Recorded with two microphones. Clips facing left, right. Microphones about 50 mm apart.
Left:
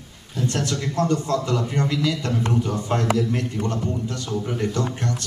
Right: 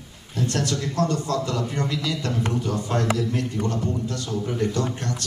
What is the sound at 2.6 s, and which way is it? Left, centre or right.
Speech, left.